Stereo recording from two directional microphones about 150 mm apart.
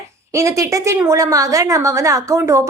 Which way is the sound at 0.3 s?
20° right (ahead or behind).